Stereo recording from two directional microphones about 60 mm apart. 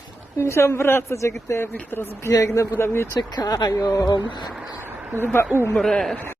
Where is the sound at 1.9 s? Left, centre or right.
Left.